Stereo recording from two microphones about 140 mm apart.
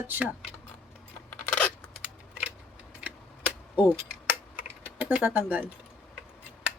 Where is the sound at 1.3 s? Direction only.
10° left (ahead or behind).